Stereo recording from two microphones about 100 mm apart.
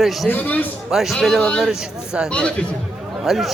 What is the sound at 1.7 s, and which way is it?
Speech, 10° right (ahead or behind).